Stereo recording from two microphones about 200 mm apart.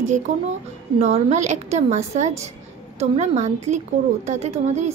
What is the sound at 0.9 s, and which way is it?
A woman's voice, 35° right (ahead or behind).